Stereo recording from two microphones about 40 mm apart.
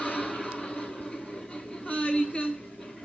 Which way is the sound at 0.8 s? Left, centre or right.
Centre.